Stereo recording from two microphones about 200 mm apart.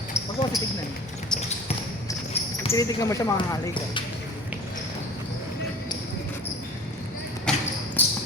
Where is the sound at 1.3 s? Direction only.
5° left (ahead or behind).